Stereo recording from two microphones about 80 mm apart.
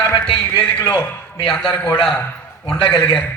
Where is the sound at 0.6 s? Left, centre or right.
Left.